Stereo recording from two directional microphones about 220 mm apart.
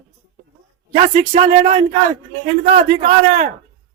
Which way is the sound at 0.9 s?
30° right (ahead or behind).